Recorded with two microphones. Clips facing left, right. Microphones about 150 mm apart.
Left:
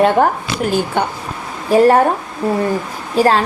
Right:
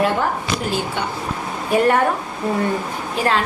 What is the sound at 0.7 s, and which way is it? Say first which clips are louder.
Speech: left 6 dB; 45° left (ahead or behind).